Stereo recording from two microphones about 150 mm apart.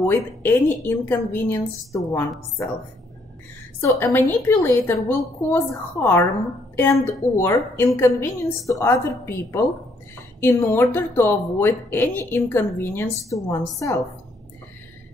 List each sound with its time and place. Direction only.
0.0 s speech: 15° left (ahead or behind)
3.8 s speech: 15° left (ahead or behind)